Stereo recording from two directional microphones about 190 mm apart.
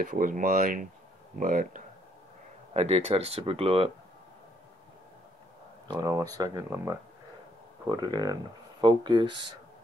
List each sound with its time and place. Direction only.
0.0 s speech: 45° right (ahead or behind)
2.7 s speech: 35° right (ahead or behind)
5.9 s speech: 15° right (ahead or behind)